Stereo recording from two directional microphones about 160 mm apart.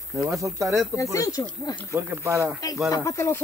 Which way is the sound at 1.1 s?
20° left (ahead or behind).